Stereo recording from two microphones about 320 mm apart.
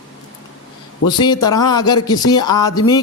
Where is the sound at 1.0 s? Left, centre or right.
Centre.